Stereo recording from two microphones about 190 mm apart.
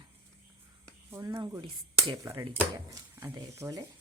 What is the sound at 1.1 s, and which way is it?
Speech, 20° right (ahead or behind).